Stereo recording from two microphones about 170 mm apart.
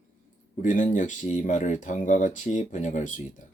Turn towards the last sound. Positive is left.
turn(degrees=45)  # may be behind; listen again after turning